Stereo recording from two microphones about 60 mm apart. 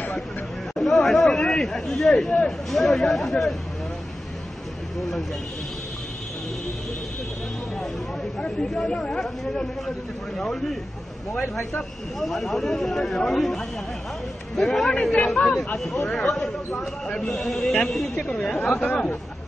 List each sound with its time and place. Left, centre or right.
0.7 s speech: centre
8.4 s speech: centre
9.2 s speech: centre
11.4 s speech: left
12.2 s speech: centre
14.9 s speech: centre
16.1 s speech: centre
18.2 s speech: centre